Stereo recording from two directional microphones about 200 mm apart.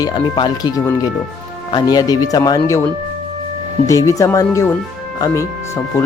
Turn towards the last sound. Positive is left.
turn(degrees=15)  # may be behind; listen again after turning